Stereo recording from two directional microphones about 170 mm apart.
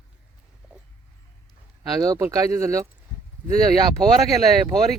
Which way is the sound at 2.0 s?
20° right (ahead or behind).